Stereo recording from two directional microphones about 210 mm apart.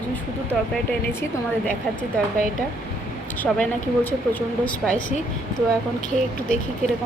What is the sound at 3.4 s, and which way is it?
Speech, 10° left (ahead or behind).